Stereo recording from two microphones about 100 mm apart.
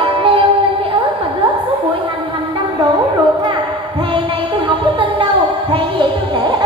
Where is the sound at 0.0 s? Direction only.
70° right (ahead or behind).